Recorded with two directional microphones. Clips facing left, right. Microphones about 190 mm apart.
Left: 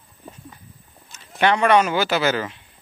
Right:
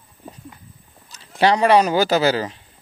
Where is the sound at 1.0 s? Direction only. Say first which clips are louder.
Right 2 dB; 35° right (ahead or behind).